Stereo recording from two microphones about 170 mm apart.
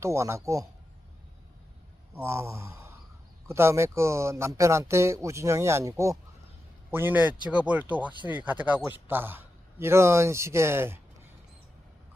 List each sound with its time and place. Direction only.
0.0 s speech: 15° right (ahead or behind)
2.1 s speech: 15° right (ahead or behind)